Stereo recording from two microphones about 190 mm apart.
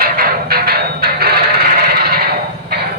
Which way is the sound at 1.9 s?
55° right (ahead or behind).